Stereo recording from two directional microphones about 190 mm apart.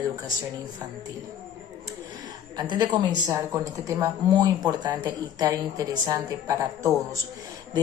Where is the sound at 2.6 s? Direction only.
20° right (ahead or behind).